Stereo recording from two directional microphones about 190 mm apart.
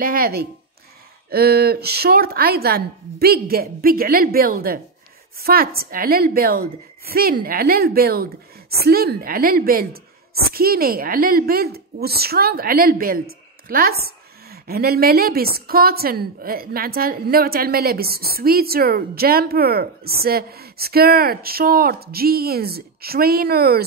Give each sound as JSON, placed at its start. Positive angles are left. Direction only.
{"t": 0.0, "sound": "a woman's voice", "side_deg": -50}